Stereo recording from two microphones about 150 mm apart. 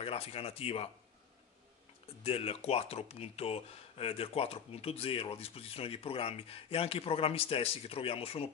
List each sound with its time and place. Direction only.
0.0 s speech: 40° left (ahead or behind)
2.2 s speech: 40° left (ahead or behind)